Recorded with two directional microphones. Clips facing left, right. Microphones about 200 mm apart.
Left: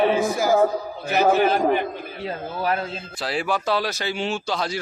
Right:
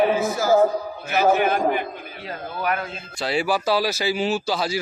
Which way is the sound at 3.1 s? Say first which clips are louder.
Right 3 dB; centre (ahead or behind).